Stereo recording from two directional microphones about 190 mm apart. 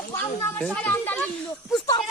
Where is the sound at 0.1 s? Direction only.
10° left (ahead or behind).